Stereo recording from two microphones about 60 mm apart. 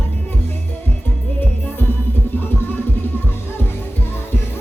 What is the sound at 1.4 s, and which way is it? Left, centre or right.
Music, left.